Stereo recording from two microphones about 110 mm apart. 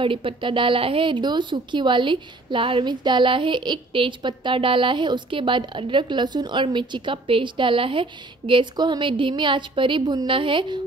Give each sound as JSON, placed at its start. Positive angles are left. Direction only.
{"t": 0.0, "sound": "speech", "side_deg": -50}